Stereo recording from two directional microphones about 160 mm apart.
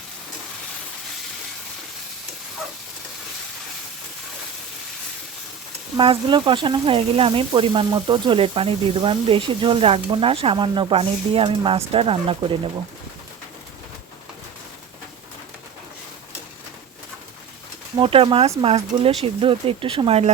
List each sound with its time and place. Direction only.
6.0 s speech: 30° right (ahead or behind)
17.9 s speech: 35° right (ahead or behind)